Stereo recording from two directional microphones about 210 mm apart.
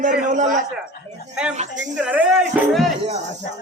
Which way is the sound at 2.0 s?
5° right (ahead or behind).